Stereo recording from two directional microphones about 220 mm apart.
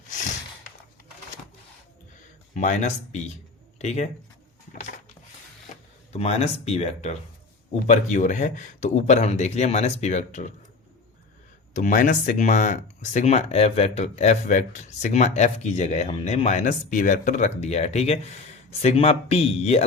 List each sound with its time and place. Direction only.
2.6 s speech: 35° left (ahead or behind)
6.1 s speech: 30° left (ahead or behind)
11.7 s speech: 35° left (ahead or behind)